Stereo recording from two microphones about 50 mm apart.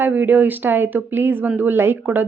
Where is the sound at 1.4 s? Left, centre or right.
Right.